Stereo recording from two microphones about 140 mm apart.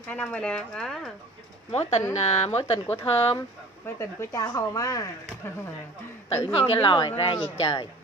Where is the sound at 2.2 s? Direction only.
50° left (ahead or behind).